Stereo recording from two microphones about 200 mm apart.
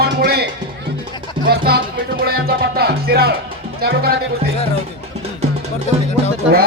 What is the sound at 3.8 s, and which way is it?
Speech, 50° right (ahead or behind).